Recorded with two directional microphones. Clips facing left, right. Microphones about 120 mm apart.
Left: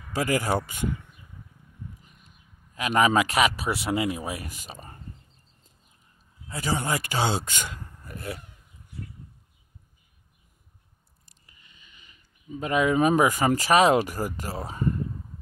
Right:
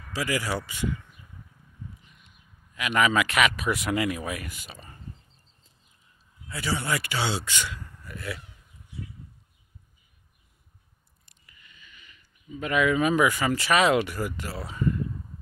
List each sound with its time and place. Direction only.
0.1 s speech: 45° left (ahead or behind)
2.0 s a man's voice: 40° left (ahead or behind)
6.4 s speech: 40° left (ahead or behind)
11.2 s a sound: 30° left (ahead or behind)
12.4 s speech: 35° left (ahead or behind)